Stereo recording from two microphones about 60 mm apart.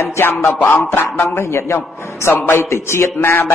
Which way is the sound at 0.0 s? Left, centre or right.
Left.